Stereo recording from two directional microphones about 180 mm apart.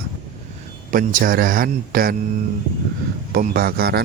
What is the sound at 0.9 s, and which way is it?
Speech, 50° right (ahead or behind).